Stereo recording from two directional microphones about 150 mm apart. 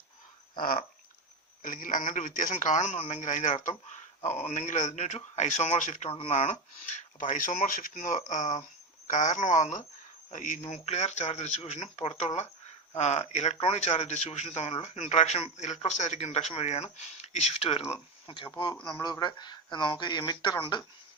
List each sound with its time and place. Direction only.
0.6 s a sound: 70° left (ahead or behind)
1.6 s a man's voice: 65° left (ahead or behind)
6.1 s a man's voice: 40° left (ahead or behind)